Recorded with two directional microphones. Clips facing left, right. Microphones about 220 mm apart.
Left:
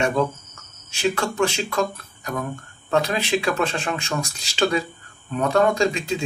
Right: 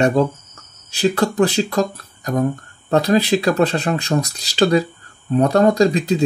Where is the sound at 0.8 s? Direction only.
35° right (ahead or behind).